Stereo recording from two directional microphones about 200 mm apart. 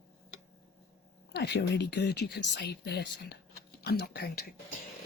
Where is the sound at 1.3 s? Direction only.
55° left (ahead or behind).